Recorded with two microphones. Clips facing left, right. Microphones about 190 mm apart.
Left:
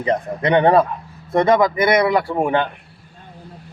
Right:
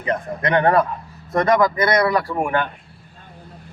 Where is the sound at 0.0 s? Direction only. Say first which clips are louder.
Left 3 dB; 30° left (ahead or behind).